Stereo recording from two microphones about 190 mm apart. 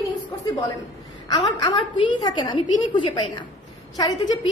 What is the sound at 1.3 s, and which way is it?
A woman's voice, 25° left (ahead or behind).